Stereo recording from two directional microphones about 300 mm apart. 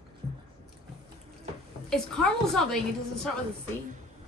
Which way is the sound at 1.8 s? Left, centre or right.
Centre.